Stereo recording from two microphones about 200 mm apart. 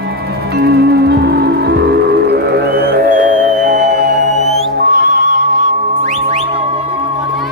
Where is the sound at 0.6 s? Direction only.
55° right (ahead or behind); by 4.5 s 35° right (ahead or behind).